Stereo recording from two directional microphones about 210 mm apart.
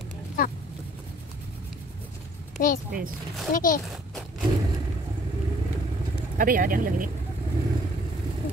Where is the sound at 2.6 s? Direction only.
40° left (ahead or behind).